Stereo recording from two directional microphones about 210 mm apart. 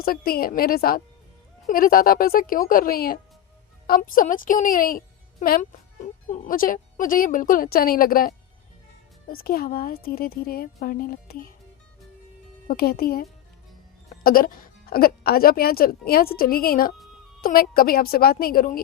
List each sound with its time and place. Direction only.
0.0 s a woman's voice: 45° left (ahead or behind)
12.6 s speech: 45° left (ahead or behind)
14.3 s speech: 40° left (ahead or behind)